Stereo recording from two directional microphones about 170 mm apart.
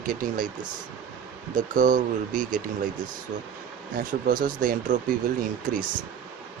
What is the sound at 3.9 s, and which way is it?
Speech, 55° right (ahead or behind).